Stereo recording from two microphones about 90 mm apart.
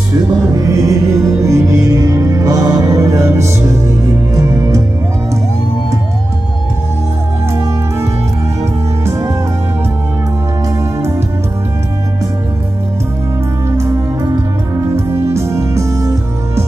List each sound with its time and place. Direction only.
0.5 s music: 40° right (ahead or behind)
10.8 s music: 30° right (ahead or behind)
13.7 s music: 35° right (ahead or behind)